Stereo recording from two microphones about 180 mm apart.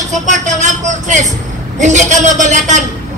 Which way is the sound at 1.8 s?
45° right (ahead or behind).